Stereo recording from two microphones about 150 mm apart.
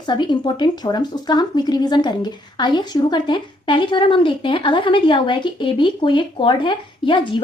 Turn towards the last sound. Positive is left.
turn(degrees=35)  # may be behind; listen again after turning